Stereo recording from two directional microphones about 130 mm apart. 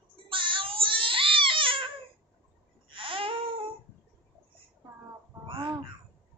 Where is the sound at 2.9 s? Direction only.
40° right (ahead or behind).